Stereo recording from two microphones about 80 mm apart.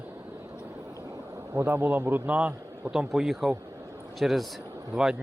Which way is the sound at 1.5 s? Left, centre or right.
Right.